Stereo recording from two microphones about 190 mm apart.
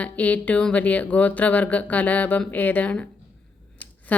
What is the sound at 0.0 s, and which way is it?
Speech, 10° left (ahead or behind).